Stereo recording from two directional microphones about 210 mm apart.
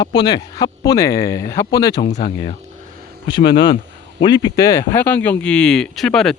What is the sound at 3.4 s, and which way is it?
Speech, 50° left (ahead or behind).